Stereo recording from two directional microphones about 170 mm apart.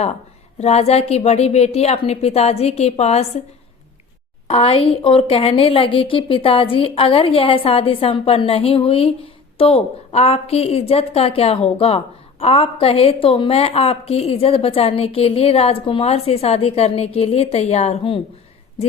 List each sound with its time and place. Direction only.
0.6 s a woman's voice: 40° left (ahead or behind)
4.4 s a woman's voice: 35° left (ahead or behind)